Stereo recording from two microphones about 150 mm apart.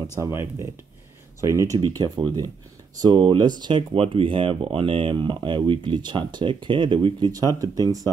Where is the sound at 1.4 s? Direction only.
20° right (ahead or behind).